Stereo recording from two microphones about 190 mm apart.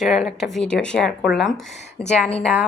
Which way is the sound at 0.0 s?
Centre (ahead or behind).